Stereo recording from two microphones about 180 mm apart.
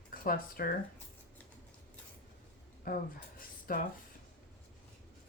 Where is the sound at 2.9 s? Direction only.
55° left (ahead or behind).